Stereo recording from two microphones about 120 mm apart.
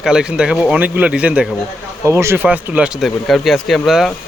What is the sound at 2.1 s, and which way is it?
Speech, 20° right (ahead or behind).